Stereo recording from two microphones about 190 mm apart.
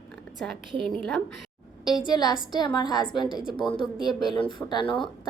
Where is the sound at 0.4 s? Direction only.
5° left (ahead or behind).